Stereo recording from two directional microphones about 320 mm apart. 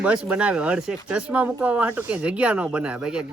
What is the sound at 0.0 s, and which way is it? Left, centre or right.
Speech, centre.